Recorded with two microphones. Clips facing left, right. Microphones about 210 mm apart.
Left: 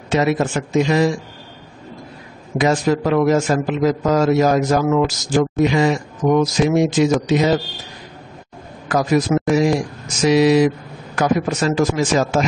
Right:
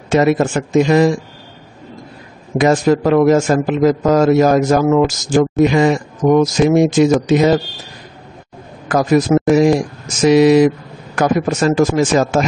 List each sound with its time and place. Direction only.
0.1 s a man's voice: 50° right (ahead or behind)
2.5 s a man's voice: 50° right (ahead or behind)
8.8 s a man's voice: 50° right (ahead or behind)